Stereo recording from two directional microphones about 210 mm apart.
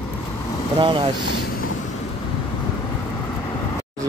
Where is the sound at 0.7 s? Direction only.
25° right (ahead or behind).